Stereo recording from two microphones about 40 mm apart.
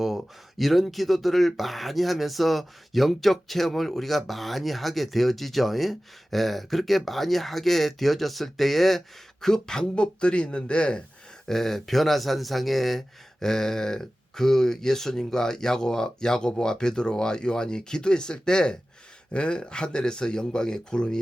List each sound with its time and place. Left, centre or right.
0.6 s speech: centre; by 11.0 s left
11.4 s speech: centre
13.4 s speech: centre